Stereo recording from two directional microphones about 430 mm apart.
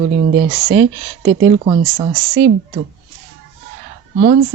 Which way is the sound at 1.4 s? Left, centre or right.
Centre.